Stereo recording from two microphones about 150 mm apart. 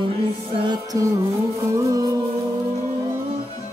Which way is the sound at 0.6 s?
25° right (ahead or behind).